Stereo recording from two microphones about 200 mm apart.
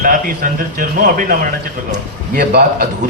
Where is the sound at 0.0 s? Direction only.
45° right (ahead or behind).